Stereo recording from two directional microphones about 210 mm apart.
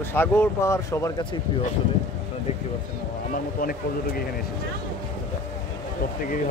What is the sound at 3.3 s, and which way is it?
Speech, 45° left (ahead or behind).